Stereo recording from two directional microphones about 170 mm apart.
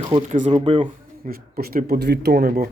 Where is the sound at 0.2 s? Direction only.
45° right (ahead or behind).